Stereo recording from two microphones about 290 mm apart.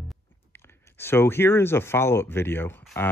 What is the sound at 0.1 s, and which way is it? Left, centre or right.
Speech, centre.